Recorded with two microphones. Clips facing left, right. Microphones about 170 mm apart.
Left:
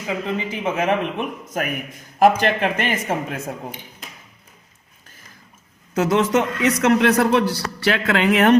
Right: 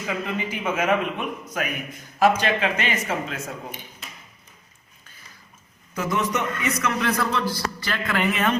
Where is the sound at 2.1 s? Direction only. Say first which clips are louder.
Left 4 dB; 50° left (ahead or behind).